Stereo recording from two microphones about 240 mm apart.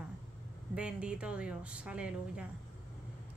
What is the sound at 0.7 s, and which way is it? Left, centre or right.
A woman's voice, centre.